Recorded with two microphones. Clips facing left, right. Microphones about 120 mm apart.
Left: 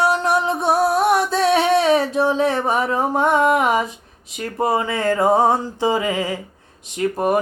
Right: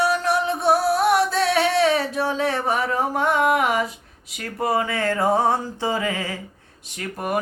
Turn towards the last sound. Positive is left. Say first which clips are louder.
# left 8 dB
turn(degrees=30)  # may be behind; listen again after turning